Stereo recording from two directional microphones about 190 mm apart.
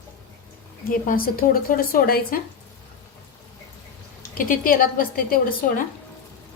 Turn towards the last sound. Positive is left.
turn(degrees=50)  # may be behind; listen again after turning